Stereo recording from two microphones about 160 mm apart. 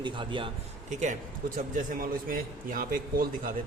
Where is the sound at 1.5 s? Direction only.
60° right (ahead or behind).